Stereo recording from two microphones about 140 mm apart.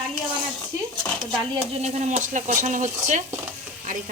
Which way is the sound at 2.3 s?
65° right (ahead or behind).